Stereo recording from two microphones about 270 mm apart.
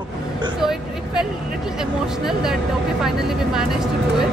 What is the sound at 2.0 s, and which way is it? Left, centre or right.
Speech, centre.